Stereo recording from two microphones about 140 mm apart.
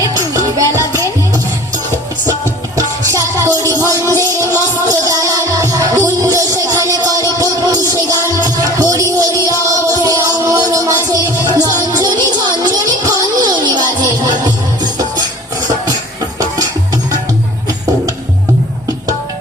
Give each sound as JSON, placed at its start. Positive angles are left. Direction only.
{"t": 0.0, "sound": "music", "side_deg": -25}